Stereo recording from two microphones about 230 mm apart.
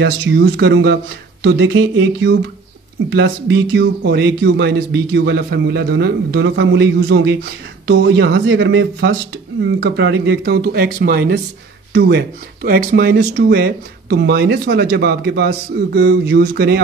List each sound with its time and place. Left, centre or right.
0.0 s speech: right